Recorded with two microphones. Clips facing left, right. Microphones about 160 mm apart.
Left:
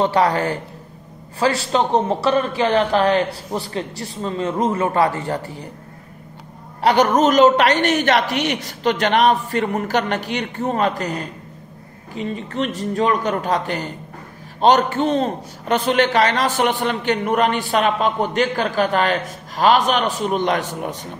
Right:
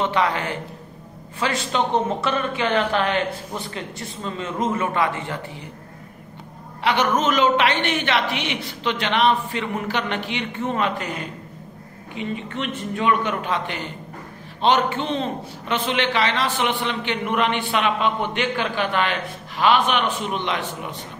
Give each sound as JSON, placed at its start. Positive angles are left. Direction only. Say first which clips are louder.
{"t": 0.0, "sound": "a man's voice", "louder": "left 5 dB", "side_deg": 35}
{"t": 6.8, "sound": "a man's voice", "louder": "left 6 dB", "side_deg": 40}